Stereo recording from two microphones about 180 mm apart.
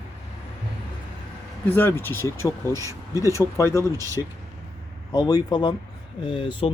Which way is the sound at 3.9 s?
20° right (ahead or behind).